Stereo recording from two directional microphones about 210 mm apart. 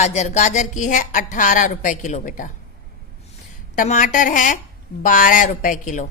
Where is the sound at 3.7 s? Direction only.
35° left (ahead or behind).